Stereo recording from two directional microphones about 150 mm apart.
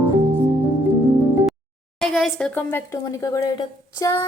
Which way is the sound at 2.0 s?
Centre (ahead or behind).